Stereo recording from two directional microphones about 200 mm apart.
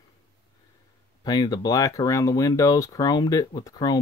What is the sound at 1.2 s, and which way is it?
Speech, 20° left (ahead or behind).